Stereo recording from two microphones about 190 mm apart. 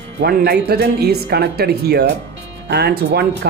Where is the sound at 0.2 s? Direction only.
60° right (ahead or behind).